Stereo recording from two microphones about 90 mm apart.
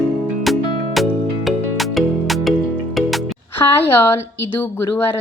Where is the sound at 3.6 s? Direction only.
40° left (ahead or behind).